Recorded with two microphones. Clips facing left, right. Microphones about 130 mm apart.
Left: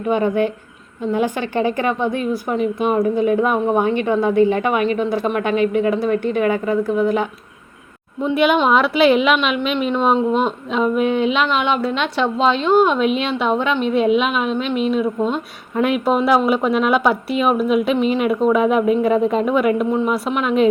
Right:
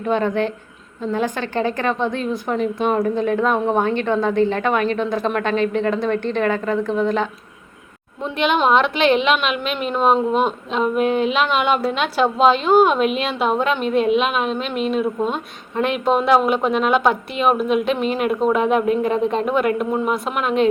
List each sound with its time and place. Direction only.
0.0 s a woman's voice: 10° left (ahead or behind)
10.9 s a woman's voice: 40° right (ahead or behind)
11.2 s speech: centre (ahead or behind)
13.6 s a woman's voice: 40° right (ahead or behind)
13.9 s speech: centre (ahead or behind)
14.3 s a woman's voice: 40° right (ahead or behind)
15.7 s speech: 5° left (ahead or behind)
18.0 s a woman's voice: 40° right (ahead or behind)
18.5 s speech: centre (ahead or behind)